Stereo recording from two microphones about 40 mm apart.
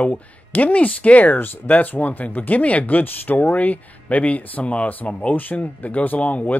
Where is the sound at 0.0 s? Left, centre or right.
Left.